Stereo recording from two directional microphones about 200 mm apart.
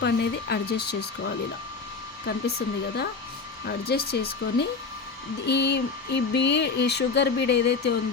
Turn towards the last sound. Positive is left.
turn(degrees=55)  # may be behind; listen again after turning